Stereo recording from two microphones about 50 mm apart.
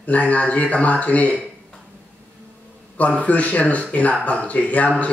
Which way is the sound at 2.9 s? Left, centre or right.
Left.